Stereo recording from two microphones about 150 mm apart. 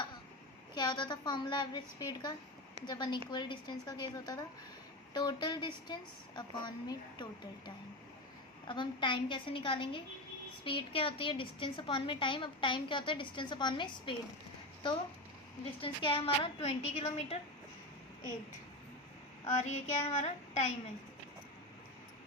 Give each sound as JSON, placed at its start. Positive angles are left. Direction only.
{"t": 0.7, "sound": "a woman's voice", "side_deg": 30}
{"t": 15.8, "sound": "a woman's voice", "side_deg": 35}
{"t": 19.5, "sound": "child singing", "side_deg": 50}